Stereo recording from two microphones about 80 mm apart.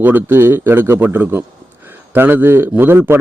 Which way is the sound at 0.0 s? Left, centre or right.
Right.